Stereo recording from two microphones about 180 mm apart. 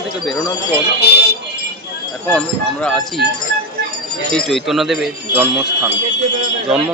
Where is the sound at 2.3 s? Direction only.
5° left (ahead or behind).